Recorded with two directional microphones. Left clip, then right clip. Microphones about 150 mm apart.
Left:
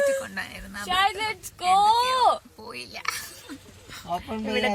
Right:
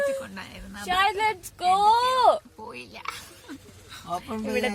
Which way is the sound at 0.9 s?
90° right.